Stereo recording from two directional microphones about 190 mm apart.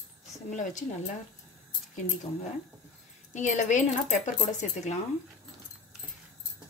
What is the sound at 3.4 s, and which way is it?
Speech, 40° left (ahead or behind).